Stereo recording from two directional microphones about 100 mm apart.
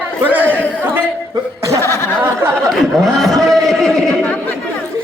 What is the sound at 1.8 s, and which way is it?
Chuckle, 25° left (ahead or behind).